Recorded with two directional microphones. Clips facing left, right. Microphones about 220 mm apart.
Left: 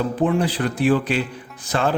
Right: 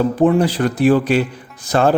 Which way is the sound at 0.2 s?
40° right (ahead or behind).